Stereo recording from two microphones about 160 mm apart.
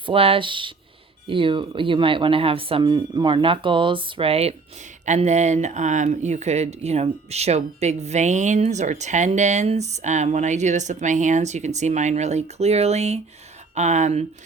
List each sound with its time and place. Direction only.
0.0 s speech: 35° right (ahead or behind)